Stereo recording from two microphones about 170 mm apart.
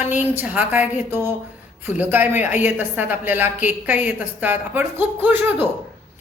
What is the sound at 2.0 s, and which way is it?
A woman's voice, 10° right (ahead or behind).